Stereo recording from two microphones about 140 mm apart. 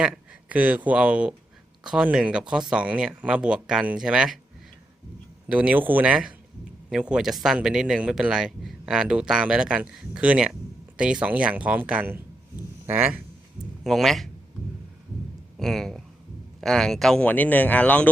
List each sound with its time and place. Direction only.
0.0 s speech: 10° right (ahead or behind)
5.5 s speech: 10° right (ahead or behind)
13.8 s a man's voice: centre (ahead or behind)
15.5 s speech: centre (ahead or behind)